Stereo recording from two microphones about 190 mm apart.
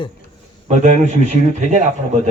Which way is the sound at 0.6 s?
40° right (ahead or behind).